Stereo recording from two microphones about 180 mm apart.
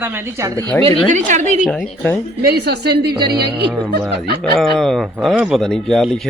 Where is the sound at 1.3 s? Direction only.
40° right (ahead or behind).